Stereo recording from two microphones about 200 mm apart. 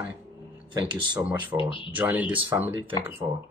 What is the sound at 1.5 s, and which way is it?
Speech, 25° left (ahead or behind).